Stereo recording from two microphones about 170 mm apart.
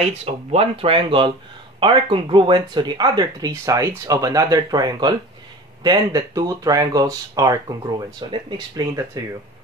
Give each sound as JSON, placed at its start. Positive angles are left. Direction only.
{"t": 0.0, "sound": "speech", "side_deg": -40}